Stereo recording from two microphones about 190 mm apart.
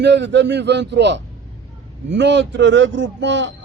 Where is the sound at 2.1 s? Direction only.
70° right (ahead or behind).